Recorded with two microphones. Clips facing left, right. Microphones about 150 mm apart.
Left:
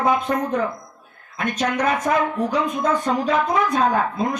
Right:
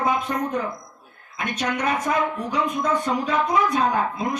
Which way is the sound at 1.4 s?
35° left (ahead or behind).